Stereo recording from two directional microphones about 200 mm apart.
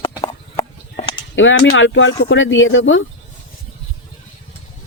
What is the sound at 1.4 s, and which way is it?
Speech, 70° left (ahead or behind).